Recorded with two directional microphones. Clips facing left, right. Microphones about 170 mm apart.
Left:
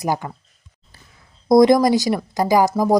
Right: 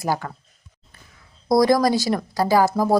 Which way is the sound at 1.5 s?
20° left (ahead or behind).